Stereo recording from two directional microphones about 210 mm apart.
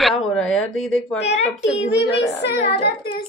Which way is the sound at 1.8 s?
55° left (ahead or behind).